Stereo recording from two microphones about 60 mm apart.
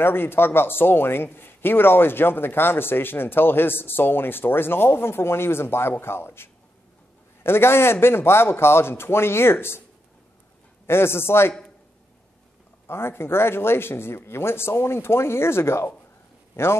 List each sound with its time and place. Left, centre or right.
0.0 s speech: left
10.9 s speech: left
12.8 s speech: left